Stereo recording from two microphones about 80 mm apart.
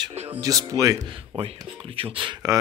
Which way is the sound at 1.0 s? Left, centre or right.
Right.